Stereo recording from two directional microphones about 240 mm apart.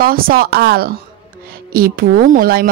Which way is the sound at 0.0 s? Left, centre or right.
Right.